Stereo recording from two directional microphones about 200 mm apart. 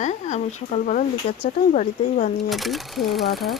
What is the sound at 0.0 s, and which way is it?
Speech, 35° left (ahead or behind).